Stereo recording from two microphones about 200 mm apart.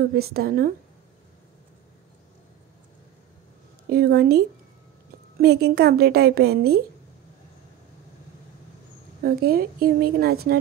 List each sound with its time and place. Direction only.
0.1 s a woman's voice: 50° right (ahead or behind)
3.9 s a woman's voice: 55° right (ahead or behind)
9.2 s a woman's voice: 50° right (ahead or behind)